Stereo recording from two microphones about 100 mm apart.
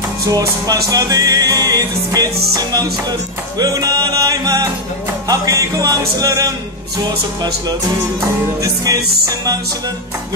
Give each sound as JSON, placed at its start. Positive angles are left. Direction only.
{"t": 0.3, "sound": "music", "side_deg": -35}
{"t": 8.6, "sound": "music", "side_deg": -35}